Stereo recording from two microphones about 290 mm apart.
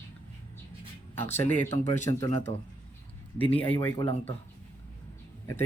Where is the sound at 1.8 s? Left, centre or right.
Left.